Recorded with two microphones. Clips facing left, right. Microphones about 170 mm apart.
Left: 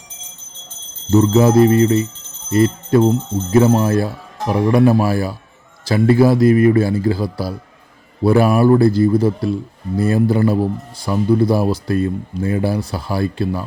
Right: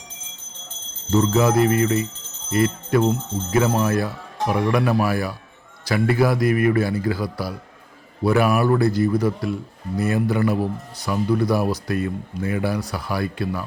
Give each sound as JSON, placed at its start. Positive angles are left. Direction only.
{"t": 1.1, "sound": "a man's voice", "side_deg": 25}